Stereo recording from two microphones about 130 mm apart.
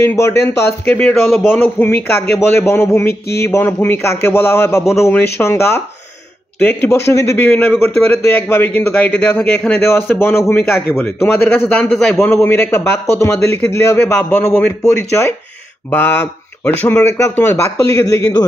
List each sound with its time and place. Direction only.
0.0 s a man's voice: 20° left (ahead or behind)
11.9 s a man's voice: 5° left (ahead or behind)
12.2 s a man's voice: 15° left (ahead or behind)